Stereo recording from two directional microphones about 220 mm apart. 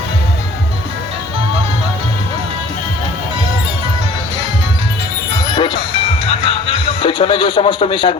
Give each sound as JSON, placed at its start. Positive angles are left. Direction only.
{"t": 5.5, "sound": "music", "side_deg": 20}
{"t": 7.0, "sound": "speech", "side_deg": 20}